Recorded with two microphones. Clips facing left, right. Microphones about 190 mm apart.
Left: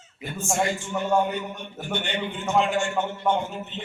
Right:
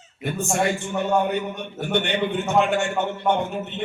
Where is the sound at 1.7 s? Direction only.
65° right (ahead or behind).